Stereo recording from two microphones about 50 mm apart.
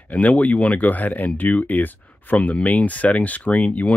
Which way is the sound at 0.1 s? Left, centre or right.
Left.